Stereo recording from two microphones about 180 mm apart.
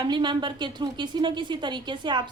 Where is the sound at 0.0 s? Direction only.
25° right (ahead or behind).